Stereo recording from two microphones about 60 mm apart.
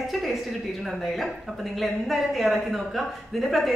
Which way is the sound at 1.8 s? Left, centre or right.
Centre.